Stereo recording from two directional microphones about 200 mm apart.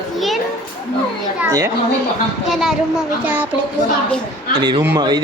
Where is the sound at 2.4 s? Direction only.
Centre (ahead or behind).